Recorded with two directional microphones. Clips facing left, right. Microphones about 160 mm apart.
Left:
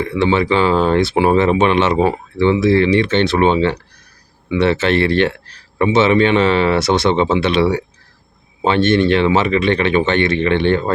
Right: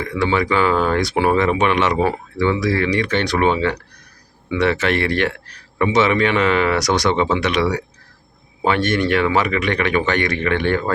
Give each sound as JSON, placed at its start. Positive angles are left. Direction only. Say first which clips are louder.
{"t": 0.0, "sound": "speech", "louder": "left 4 dB", "side_deg": 25}